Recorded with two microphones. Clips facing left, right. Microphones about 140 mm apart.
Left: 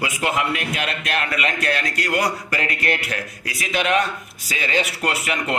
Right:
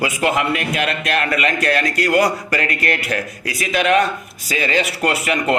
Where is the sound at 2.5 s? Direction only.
45° right (ahead or behind).